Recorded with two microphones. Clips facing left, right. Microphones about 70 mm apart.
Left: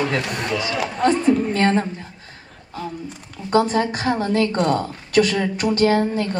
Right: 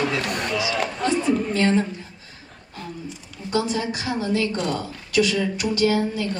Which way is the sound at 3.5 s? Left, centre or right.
Left.